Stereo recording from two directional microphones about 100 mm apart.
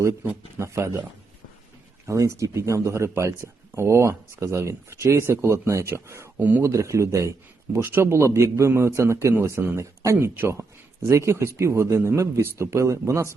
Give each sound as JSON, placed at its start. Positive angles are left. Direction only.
{"t": 0.0, "sound": "speech", "side_deg": -30}
{"t": 2.0, "sound": "speech", "side_deg": -30}
{"t": 6.6, "sound": "speech", "side_deg": -30}